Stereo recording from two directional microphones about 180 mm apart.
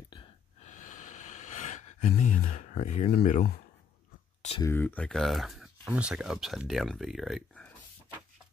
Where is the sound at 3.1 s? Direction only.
50° left (ahead or behind).